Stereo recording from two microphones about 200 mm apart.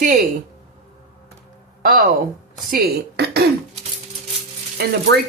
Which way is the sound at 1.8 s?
45° right (ahead or behind).